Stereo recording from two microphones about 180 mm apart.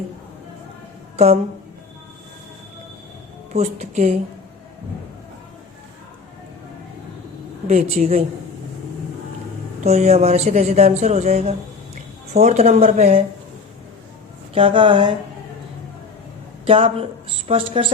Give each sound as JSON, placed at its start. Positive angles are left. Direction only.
{"t": 1.1, "sound": "a woman's voice", "side_deg": -35}
{"t": 3.5, "sound": "speech", "side_deg": -35}
{"t": 7.7, "sound": "speech", "side_deg": -35}
{"t": 9.8, "sound": "speech", "side_deg": -40}
{"t": 14.5, "sound": "speech", "side_deg": -30}
{"t": 16.6, "sound": "speech", "side_deg": -30}